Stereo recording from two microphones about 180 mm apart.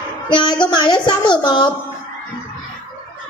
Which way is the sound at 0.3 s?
25° left (ahead or behind).